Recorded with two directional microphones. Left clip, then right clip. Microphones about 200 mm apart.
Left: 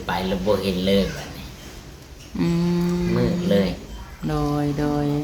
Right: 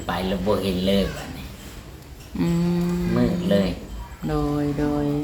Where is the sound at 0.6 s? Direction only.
20° left (ahead or behind).